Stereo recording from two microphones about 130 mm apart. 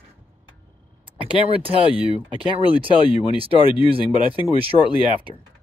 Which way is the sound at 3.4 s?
45° right (ahead or behind).